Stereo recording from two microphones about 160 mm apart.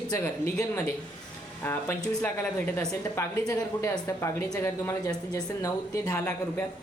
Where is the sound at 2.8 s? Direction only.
15° left (ahead or behind).